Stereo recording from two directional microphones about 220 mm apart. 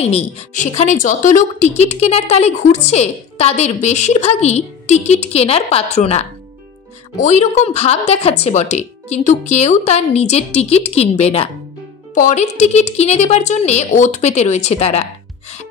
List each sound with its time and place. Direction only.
0.0 s a woman's voice: 30° left (ahead or behind)